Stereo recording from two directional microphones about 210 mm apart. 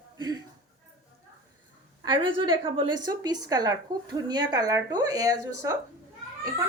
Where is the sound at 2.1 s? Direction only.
25° right (ahead or behind).